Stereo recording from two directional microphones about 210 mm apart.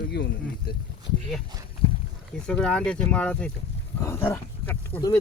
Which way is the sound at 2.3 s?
5° left (ahead or behind).